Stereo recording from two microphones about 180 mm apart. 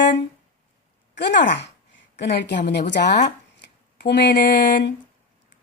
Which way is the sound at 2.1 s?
75° left (ahead or behind).